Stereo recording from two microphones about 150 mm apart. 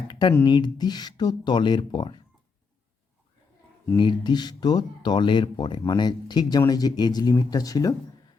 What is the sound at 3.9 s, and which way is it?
Speech, 30° left (ahead or behind).